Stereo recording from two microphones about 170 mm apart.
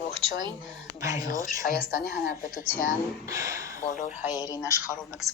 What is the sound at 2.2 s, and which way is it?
Speech, 55° left (ahead or behind).